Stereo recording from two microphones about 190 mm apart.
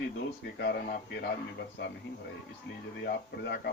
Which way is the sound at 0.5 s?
65° left (ahead or behind).